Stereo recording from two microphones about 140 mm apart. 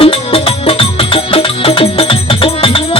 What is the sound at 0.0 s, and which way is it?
Music, 45° left (ahead or behind).